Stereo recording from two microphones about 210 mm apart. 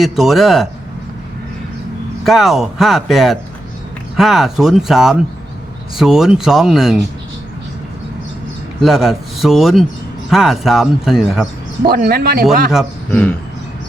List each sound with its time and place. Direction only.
0.0 s speech: centre (ahead or behind)
2.2 s speech: centre (ahead or behind)
8.8 s speech: centre (ahead or behind)
11.9 s speech: 45° right (ahead or behind)
13.1 s speech: 5° left (ahead or behind)